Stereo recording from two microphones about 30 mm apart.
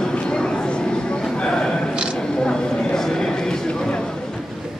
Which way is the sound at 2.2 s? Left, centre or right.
Left.